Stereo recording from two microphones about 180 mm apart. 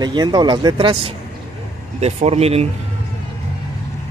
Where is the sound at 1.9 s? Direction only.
35° right (ahead or behind).